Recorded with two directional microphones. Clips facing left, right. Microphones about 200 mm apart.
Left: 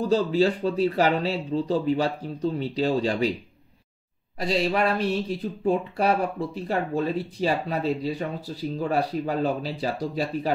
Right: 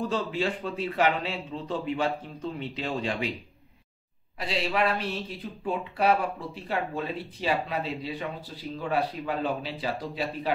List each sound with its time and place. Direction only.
0.0 s speech: 35° left (ahead or behind)
4.4 s speech: 40° left (ahead or behind)